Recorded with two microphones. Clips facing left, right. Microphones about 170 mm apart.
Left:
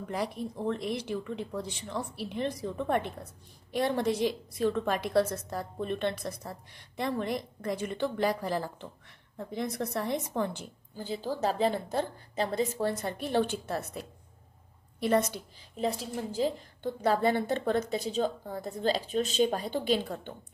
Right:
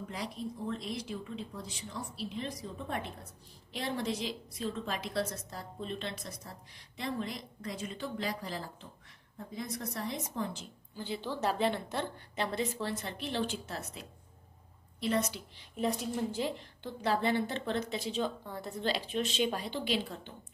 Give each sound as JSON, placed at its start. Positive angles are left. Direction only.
{"t": 0.1, "sound": "speech", "side_deg": 55}
{"t": 3.7, "sound": "speech", "side_deg": 55}
{"t": 9.5, "sound": "a woman's voice", "side_deg": 70}
{"t": 11.0, "sound": "a woman's voice", "side_deg": 40}